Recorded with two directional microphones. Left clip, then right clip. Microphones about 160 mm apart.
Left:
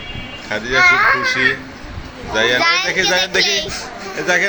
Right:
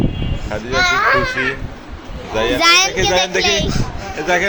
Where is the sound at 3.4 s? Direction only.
60° right (ahead or behind).